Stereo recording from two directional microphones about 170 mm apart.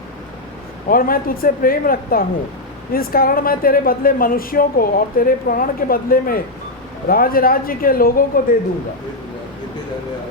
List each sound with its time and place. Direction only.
0.9 s a woman's voice: 55° left (ahead or behind)